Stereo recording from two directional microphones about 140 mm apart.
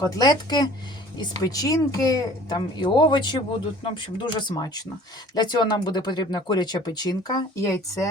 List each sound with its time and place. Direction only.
0.0 s speech: 25° left (ahead or behind)